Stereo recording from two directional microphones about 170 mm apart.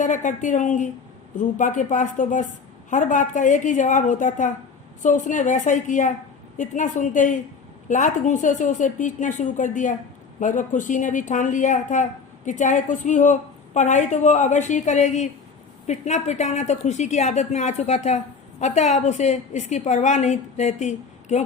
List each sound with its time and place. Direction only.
0.0 s a woman's voice: 45° left (ahead or behind)